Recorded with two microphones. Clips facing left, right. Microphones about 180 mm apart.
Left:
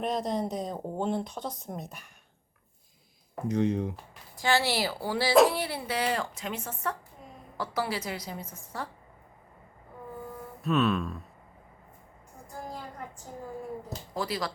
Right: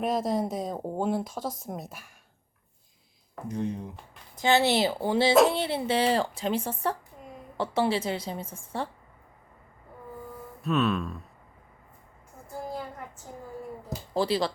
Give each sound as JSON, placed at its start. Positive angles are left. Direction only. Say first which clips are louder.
{"t": 0.0, "sound": "speech", "louder": "right 3 dB", "side_deg": -5}
{"t": 3.5, "sound": "speech", "louder": "left 5 dB", "side_deg": 90}
{"t": 4.4, "sound": "speech", "louder": "right 4 dB", "side_deg": -20}
{"t": 10.6, "sound": "speech", "louder": "even", "side_deg": 0}
{"t": 14.1, "sound": "speech", "louder": "right 7 dB", "side_deg": -30}